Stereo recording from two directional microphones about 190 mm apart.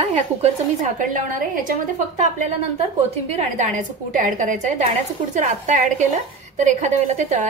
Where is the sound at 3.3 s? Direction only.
40° right (ahead or behind).